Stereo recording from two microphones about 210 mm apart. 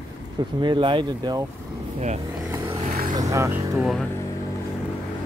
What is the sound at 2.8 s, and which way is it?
Vehicle, 40° right (ahead or behind).